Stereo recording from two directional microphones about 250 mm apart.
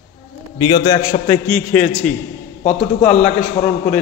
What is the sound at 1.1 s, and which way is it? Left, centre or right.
Speech, left.